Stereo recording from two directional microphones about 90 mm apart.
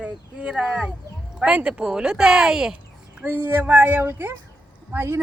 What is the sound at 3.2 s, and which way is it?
A woman's voice, 25° right (ahead or behind).